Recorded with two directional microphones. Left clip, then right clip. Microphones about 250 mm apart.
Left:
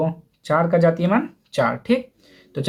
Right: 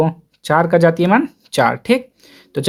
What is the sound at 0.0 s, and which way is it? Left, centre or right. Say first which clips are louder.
Speech: right 6 dB; right.